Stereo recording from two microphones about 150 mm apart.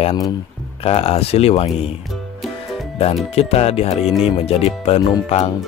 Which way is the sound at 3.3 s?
45° left (ahead or behind).